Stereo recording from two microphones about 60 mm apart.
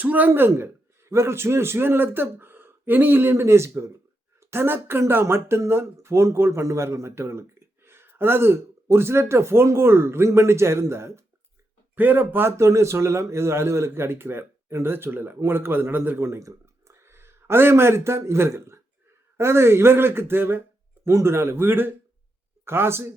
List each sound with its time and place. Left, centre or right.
0.0 s a man's voice: right
4.4 s speech: right
11.9 s a man's voice: right